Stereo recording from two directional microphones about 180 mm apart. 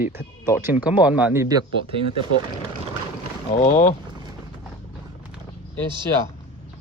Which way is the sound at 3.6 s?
40° left (ahead or behind).